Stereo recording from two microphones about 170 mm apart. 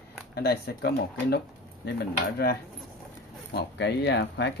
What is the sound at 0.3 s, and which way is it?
Speech, 70° left (ahead or behind).